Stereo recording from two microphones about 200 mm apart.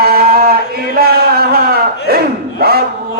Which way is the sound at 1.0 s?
50° right (ahead or behind).